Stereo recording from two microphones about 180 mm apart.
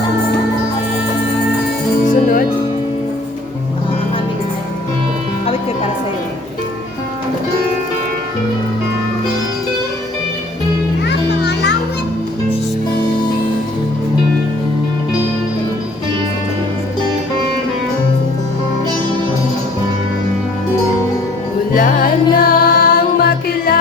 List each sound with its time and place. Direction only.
2.0 s music: 50° left (ahead or behind)
11.0 s music: 70° left (ahead or behind)
21.7 s music: 50° left (ahead or behind)